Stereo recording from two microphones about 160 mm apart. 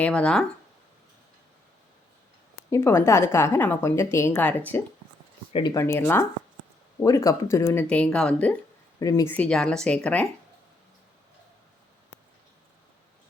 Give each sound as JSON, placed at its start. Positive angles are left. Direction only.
{"t": 0.0, "sound": "speech", "side_deg": 5}
{"t": 2.6, "sound": "a woman's voice", "side_deg": 15}
{"t": 9.0, "sound": "speech", "side_deg": 20}
{"t": 9.3, "sound": "a woman's voice", "side_deg": 5}